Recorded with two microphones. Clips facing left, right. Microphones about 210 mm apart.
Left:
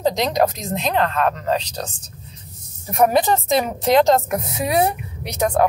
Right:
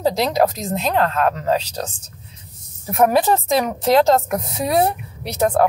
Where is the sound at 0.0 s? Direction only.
5° right (ahead or behind).